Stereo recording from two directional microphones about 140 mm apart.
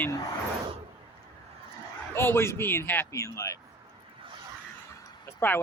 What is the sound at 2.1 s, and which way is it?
Speech, 15° left (ahead or behind).